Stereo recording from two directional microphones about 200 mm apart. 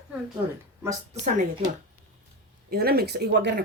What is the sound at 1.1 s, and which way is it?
Speech, 40° right (ahead or behind).